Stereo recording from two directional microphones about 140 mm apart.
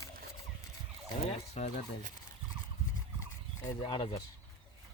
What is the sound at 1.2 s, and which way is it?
Speech, 50° left (ahead or behind).